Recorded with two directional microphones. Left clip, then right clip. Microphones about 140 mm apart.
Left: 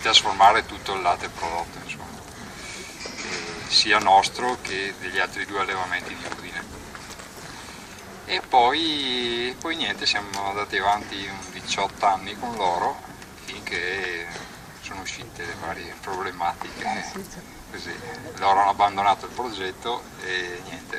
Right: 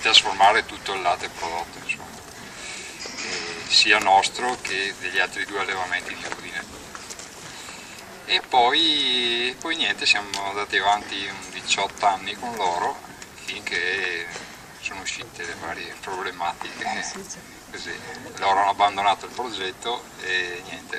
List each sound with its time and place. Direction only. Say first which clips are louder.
0.0 s speech: even; 15° right (ahead or behind)
3.8 s speech: even; 15° right (ahead or behind)
8.3 s speech: even; 15° right (ahead or behind)
18.3 s speech: left 1 dB; 15° right (ahead or behind)